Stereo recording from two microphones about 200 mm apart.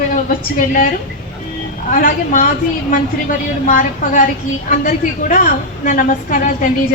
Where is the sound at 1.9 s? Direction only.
40° left (ahead or behind).